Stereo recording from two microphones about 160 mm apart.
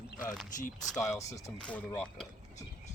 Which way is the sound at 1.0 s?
20° left (ahead or behind).